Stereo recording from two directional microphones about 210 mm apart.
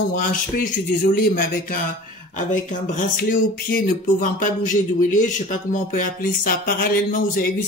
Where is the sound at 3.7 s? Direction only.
40° left (ahead or behind).